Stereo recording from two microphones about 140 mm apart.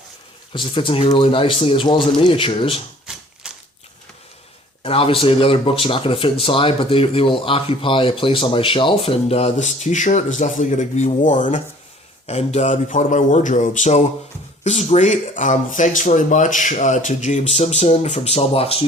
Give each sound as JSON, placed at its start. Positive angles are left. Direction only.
{"t": 0.5, "sound": "speech", "side_deg": 35}
{"t": 3.1, "sound": "typewriter", "side_deg": -5}
{"t": 3.4, "sound": "a sound", "side_deg": -5}
{"t": 4.8, "sound": "speech", "side_deg": 40}
{"t": 12.2, "sound": "speech", "side_deg": 50}